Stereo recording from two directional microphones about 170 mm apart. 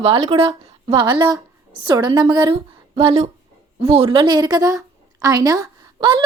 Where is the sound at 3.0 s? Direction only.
35° right (ahead or behind).